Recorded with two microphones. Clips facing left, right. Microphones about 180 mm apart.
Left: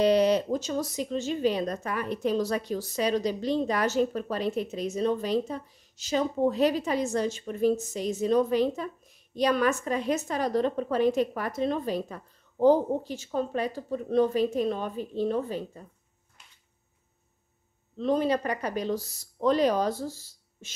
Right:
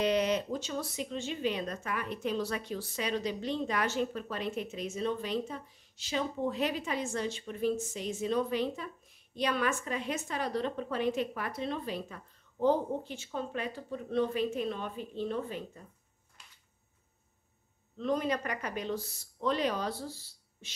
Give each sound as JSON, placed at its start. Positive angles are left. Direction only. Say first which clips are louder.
{"t": 0.0, "sound": "speech", "louder": "left 7 dB", "side_deg": 35}
{"t": 17.9, "sound": "speech", "louder": "left 6 dB", "side_deg": 30}